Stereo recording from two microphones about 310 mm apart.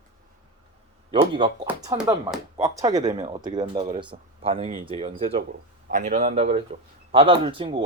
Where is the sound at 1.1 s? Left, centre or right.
Centre.